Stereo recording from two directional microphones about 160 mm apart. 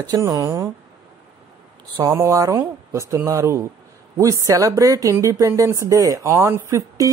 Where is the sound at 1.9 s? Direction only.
20° right (ahead or behind).